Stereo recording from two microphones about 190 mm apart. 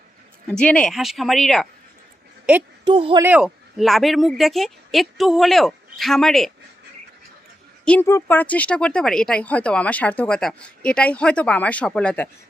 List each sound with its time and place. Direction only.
0.4 s speech: 5° left (ahead or behind)
2.8 s speech: 25° right (ahead or behind)
3.2 s speech: 5° right (ahead or behind)
7.9 s speech: 10° left (ahead or behind)